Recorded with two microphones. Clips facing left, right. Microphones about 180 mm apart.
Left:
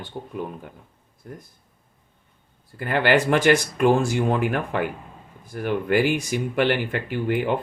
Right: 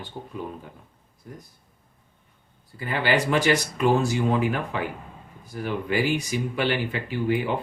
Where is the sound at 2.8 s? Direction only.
60° left (ahead or behind).